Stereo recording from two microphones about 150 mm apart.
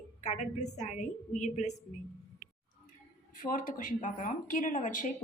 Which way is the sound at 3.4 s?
65° left (ahead or behind).